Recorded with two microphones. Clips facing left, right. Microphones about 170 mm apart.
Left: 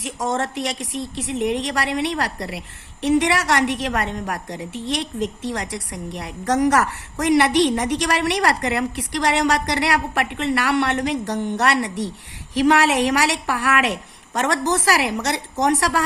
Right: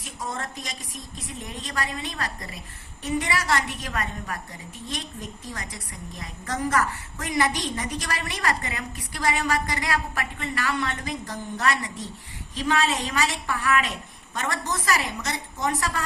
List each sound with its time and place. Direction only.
0.0 s a woman's voice: 85° left